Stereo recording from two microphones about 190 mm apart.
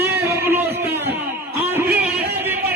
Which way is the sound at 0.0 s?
10° right (ahead or behind).